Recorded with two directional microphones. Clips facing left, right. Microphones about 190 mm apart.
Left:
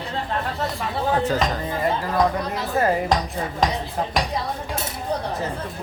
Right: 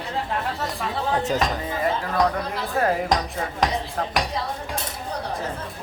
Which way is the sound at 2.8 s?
Centre (ahead or behind).